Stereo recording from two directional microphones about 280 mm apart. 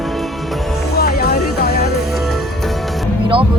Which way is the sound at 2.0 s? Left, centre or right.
Centre.